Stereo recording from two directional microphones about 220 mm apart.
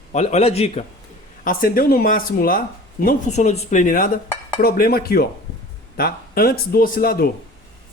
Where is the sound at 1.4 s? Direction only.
40° left (ahead or behind).